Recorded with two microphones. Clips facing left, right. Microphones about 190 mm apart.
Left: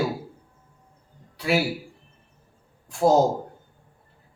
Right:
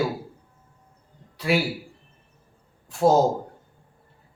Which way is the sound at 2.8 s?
Centre (ahead or behind).